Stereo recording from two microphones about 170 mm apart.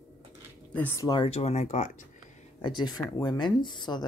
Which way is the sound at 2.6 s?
25° left (ahead or behind).